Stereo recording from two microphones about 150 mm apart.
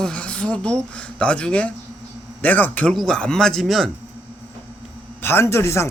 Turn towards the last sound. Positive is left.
turn(degrees=20)  # may be behind; listen again after turning